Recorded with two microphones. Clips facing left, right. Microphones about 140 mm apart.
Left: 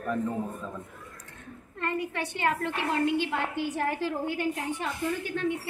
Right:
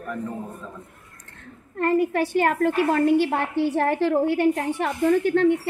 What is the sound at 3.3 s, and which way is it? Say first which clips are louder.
A woman's voice: right 7 dB; 65° right (ahead or behind).